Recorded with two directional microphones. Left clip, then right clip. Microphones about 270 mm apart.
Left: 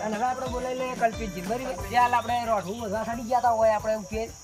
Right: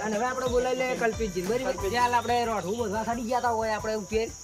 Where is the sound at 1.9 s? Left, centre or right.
Centre.